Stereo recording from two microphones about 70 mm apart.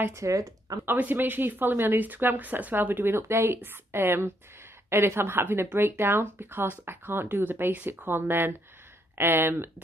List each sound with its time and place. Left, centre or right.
0.1 s speech: right
0.8 s speech: right